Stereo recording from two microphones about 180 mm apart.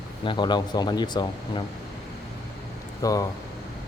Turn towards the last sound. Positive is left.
turn(degrees=20)  # may be behind; listen again after turning